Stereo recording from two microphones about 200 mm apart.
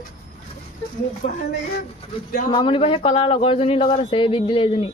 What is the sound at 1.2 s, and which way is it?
Speech, 40° left (ahead or behind).